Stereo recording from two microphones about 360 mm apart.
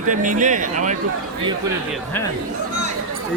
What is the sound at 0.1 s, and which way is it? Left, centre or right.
Speech, right.